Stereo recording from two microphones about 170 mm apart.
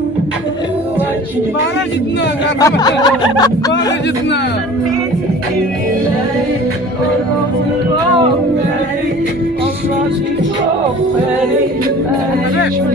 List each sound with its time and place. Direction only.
2.6 s snicker: 25° left (ahead or behind)